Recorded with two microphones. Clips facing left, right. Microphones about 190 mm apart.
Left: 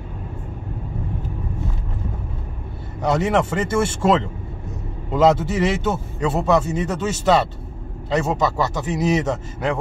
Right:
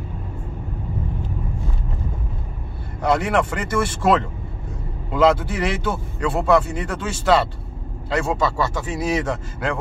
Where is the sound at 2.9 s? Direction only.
20° left (ahead or behind).